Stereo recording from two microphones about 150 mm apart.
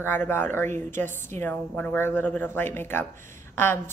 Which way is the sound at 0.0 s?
15° left (ahead or behind).